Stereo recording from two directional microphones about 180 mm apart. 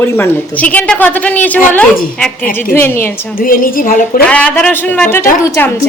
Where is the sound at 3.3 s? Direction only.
50° left (ahead or behind).